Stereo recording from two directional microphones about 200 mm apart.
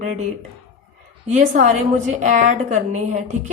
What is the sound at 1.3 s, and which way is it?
A woman's voice, 40° right (ahead or behind).